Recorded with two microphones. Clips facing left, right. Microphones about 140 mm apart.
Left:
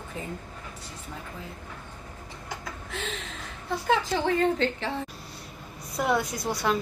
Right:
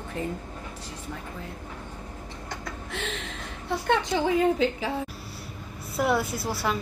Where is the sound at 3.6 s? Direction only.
5° left (ahead or behind).